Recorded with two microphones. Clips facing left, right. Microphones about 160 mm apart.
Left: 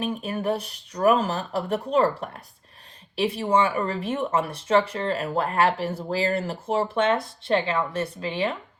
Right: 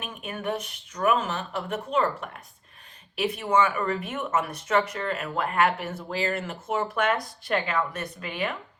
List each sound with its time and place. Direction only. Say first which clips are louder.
0.0 s speech: left 6 dB; 35° left (ahead or behind)